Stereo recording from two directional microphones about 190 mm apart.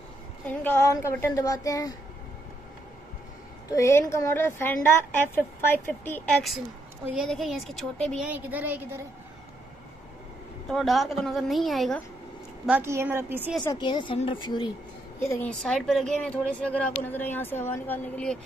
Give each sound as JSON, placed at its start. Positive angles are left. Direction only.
{"t": 0.5, "sound": "a woman's voice", "side_deg": 10}
{"t": 3.7, "sound": "a woman's voice", "side_deg": 15}
{"t": 7.2, "sound": "a woman's voice", "side_deg": 0}
{"t": 8.3, "sound": "a woman's voice", "side_deg": -10}
{"t": 10.7, "sound": "a woman's voice", "side_deg": 0}
{"t": 12.6, "sound": "a woman's voice", "side_deg": -10}
{"t": 13.7, "sound": "a woman's voice", "side_deg": 25}
{"t": 15.1, "sound": "a woman's voice", "side_deg": 10}